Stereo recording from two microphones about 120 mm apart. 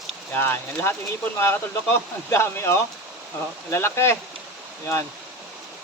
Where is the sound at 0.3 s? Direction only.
20° left (ahead or behind).